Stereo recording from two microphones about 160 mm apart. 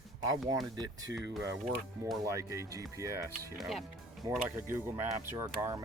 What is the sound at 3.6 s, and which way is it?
Speech, centre (ahead or behind).